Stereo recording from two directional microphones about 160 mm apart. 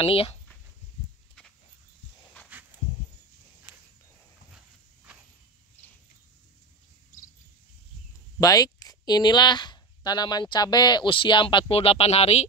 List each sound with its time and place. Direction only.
0.0 s speech: 35° left (ahead or behind)
3.7 s a sound: 30° left (ahead or behind)
8.4 s speech: 20° left (ahead or behind); by 12.4 s 40° left (ahead or behind)